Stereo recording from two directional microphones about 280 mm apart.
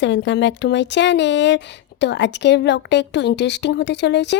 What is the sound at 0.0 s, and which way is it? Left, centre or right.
Speech, left.